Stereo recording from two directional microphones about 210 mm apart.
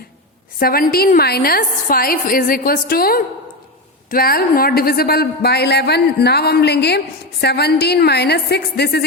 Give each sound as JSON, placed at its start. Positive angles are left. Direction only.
{"t": 0.6, "sound": "a woman's voice", "side_deg": 45}